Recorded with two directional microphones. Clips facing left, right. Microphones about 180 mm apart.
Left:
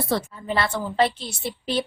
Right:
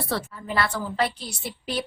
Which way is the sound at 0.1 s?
25° left (ahead or behind).